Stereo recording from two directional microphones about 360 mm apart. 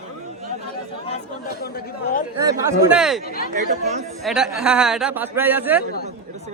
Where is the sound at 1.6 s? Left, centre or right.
Left.